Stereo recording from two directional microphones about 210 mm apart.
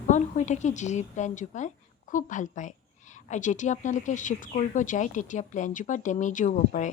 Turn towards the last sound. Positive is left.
turn(degrees=35)  # may be behind; listen again after turning